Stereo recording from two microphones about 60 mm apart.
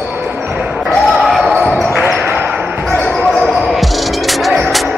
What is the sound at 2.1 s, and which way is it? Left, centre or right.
Basketball bounce, right.